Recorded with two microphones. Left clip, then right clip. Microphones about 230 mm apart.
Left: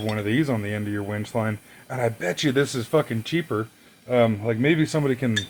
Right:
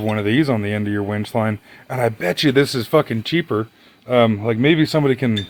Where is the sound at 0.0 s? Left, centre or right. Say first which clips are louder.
Right 6 dB; right.